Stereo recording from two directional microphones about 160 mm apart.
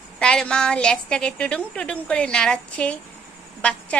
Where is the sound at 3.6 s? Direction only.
10° left (ahead or behind).